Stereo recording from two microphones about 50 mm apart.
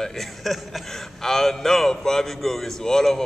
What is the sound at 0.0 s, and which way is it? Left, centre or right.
Speech, centre.